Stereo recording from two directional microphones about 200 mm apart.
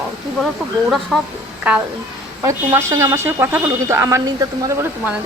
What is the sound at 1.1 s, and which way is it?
Speech, centre (ahead or behind).